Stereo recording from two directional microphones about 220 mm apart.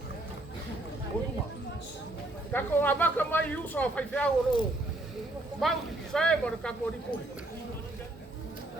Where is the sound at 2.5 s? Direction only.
10° left (ahead or behind).